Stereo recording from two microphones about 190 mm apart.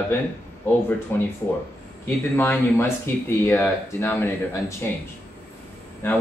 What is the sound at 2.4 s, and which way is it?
Speech, 10° left (ahead or behind).